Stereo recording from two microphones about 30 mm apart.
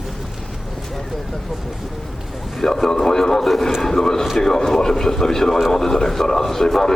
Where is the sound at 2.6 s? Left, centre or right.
Centre.